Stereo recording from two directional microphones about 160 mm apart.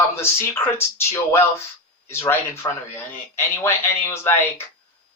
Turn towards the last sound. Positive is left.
turn(degrees=15)  # may be behind; listen again after turning